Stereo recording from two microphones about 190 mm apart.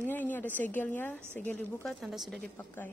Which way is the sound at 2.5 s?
10° left (ahead or behind).